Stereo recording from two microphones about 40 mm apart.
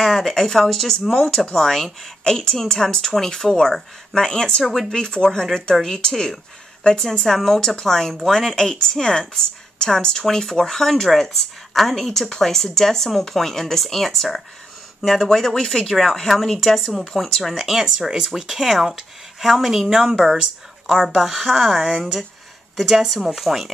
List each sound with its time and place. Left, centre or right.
0.0 s a woman's voice: centre